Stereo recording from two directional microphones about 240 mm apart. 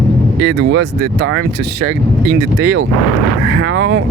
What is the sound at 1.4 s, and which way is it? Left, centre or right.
Speech, right.